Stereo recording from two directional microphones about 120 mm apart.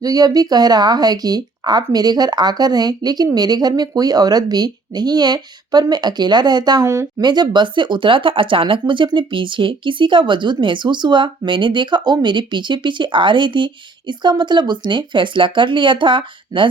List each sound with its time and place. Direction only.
0.0 s speech: 30° right (ahead or behind)
6.8 s speech: 25° right (ahead or behind)
7.2 s speech: 35° right (ahead or behind)